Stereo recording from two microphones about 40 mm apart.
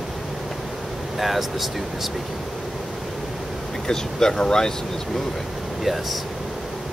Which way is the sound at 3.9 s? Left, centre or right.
Centre.